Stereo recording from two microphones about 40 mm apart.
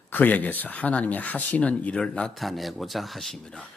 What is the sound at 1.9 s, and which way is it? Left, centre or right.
Speech, left.